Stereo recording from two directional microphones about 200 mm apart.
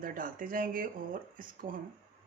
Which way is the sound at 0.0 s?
45° right (ahead or behind).